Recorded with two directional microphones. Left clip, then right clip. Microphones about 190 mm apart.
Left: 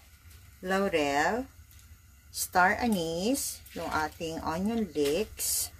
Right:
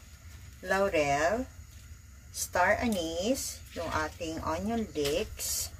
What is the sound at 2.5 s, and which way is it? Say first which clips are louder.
Speech: left 2 dB; 50° left (ahead or behind).